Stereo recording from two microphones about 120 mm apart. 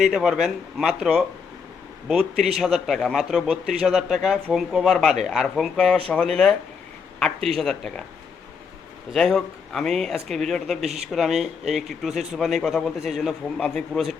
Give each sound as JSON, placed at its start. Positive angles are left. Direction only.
{"t": 0.0, "sound": "speech", "side_deg": -5}
{"t": 9.1, "sound": "speech", "side_deg": 0}
{"t": 10.8, "sound": "speech", "side_deg": -65}
{"t": 11.1, "sound": "speech", "side_deg": -5}